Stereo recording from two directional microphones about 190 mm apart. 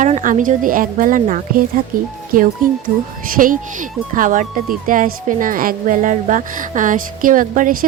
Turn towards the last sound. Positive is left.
turn(degrees=-45)  # may be behind; listen again after turning